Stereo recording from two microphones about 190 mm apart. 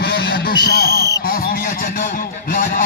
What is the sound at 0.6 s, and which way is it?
Speech, 60° left (ahead or behind).